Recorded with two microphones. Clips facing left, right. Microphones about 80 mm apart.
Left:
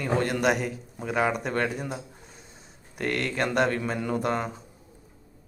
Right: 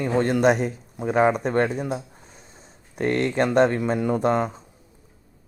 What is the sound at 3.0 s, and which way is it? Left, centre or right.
Speech, right.